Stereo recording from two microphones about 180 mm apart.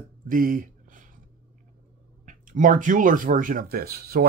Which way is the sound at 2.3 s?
45° right (ahead or behind).